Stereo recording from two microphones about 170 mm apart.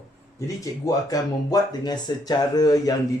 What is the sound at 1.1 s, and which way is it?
Speech, 20° left (ahead or behind).